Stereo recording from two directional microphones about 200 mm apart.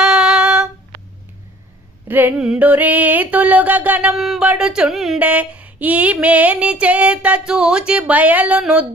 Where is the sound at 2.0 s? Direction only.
10° right (ahead or behind).